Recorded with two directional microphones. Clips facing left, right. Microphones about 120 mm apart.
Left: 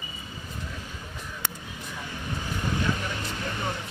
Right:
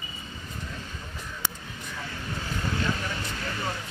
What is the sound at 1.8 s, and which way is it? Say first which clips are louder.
Vehicle: even; 15° left (ahead or behind).